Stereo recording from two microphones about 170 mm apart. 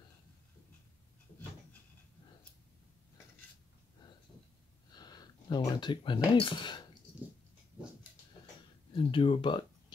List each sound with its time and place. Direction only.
4.9 s speech: 25° left (ahead or behind)
8.9 s speech: 30° left (ahead or behind)